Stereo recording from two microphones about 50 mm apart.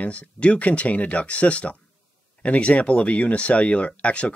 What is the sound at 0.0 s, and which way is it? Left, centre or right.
Speech, left.